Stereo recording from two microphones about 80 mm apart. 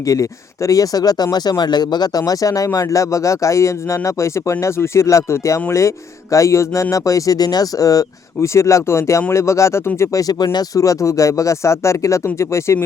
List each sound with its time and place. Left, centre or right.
0.0 s speech: left
10.8 s speech: left